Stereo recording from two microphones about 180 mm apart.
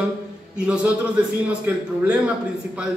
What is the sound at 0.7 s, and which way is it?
A man's voice, 5° right (ahead or behind).